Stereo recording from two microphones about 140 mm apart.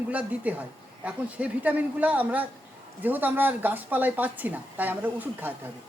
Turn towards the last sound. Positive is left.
turn(degrees=-15)  # may be behind; listen again after turning